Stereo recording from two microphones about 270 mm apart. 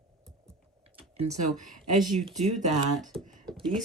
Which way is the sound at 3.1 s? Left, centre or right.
Right.